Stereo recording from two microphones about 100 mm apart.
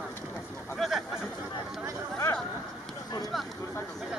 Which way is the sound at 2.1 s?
25° left (ahead or behind).